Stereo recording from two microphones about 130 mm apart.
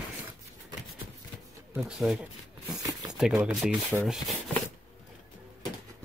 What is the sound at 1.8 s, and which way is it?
Speech, 5° right (ahead or behind).